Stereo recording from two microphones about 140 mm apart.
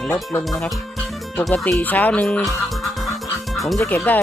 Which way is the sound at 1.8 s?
10° left (ahead or behind).